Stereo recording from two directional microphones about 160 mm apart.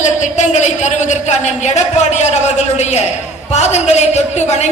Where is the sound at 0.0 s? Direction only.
50° left (ahead or behind).